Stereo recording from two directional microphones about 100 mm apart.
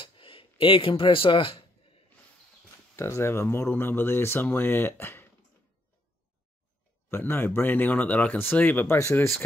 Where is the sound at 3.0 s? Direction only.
25° left (ahead or behind).